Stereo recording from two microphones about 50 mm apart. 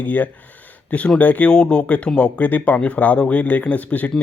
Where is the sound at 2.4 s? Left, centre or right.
Left.